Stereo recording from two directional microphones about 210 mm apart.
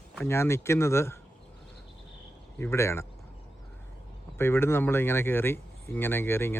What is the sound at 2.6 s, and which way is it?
Speech, 15° left (ahead or behind).